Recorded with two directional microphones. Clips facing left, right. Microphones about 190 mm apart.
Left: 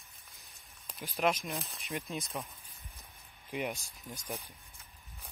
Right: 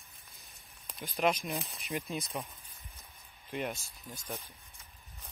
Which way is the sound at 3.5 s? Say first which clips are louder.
Even; 10° left (ahead or behind).